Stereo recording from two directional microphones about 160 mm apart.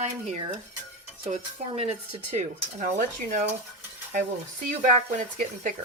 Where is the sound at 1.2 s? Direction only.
40° right (ahead or behind).